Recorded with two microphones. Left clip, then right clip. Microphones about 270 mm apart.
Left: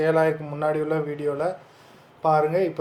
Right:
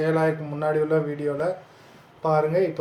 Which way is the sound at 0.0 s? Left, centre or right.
Centre.